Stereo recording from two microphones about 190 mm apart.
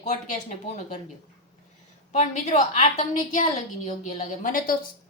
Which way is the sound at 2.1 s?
35° left (ahead or behind).